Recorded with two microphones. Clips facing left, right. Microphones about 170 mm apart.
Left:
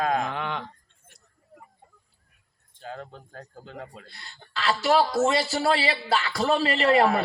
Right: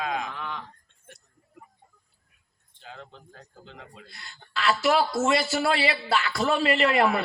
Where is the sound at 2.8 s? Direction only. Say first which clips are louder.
Left 6 dB; 45° left (ahead or behind).